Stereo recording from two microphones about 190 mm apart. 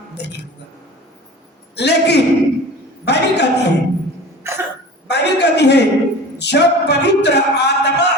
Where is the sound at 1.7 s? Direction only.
65° left (ahead or behind).